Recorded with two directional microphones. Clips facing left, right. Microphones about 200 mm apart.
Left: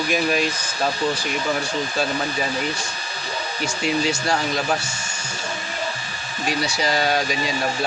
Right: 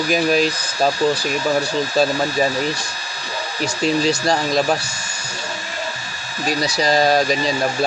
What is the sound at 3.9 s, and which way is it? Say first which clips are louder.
Speech: right 4 dB; 35° right (ahead or behind).